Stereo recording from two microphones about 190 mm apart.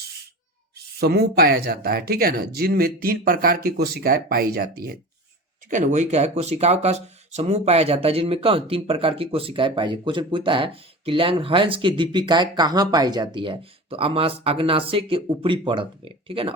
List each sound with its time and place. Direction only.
0.8 s speech: 55° right (ahead or behind)
5.7 s speech: 40° right (ahead or behind)